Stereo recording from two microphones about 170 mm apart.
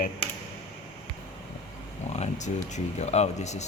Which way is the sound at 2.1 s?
45° left (ahead or behind).